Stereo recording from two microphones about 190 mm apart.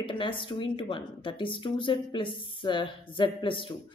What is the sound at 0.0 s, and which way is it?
A woman's voice, 25° left (ahead or behind).